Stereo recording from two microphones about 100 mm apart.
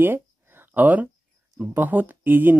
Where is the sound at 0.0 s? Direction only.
20° right (ahead or behind).